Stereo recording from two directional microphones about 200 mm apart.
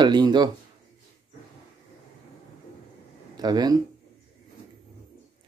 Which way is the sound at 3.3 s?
20° right (ahead or behind).